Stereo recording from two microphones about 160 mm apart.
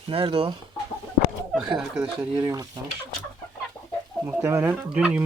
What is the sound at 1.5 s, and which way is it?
Speech, centre (ahead or behind).